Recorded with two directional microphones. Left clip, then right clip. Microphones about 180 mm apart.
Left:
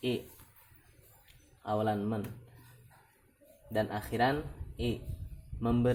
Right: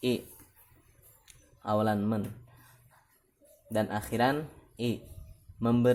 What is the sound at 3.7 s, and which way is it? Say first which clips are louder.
Speech: right 2 dB; 60° right (ahead or behind).